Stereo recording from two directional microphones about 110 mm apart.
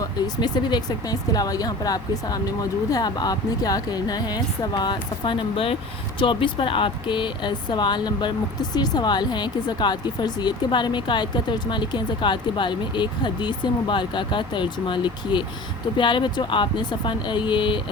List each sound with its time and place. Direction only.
0.0 s speech: 40° left (ahead or behind)